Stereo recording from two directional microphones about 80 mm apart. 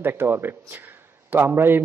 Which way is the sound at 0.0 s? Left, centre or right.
Right.